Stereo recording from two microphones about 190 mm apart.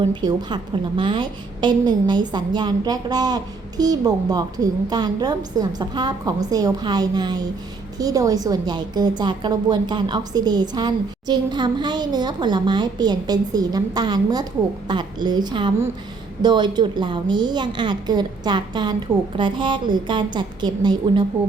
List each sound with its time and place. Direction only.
0.1 s a woman's voice: 20° right (ahead or behind)